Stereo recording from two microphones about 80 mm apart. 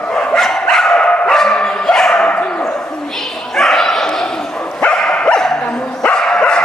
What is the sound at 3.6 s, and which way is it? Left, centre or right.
Bow-wow, centre.